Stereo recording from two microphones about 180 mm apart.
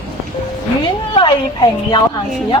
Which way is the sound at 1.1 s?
25° left (ahead or behind).